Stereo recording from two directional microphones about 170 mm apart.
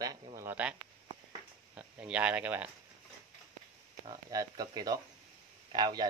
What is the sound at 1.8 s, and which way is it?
Speech, 5° right (ahead or behind).